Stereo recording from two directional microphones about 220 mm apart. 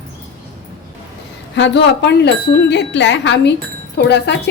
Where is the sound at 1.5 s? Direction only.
55° left (ahead or behind).